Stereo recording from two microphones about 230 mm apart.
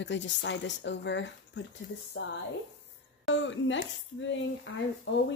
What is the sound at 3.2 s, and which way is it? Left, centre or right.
Speech, left.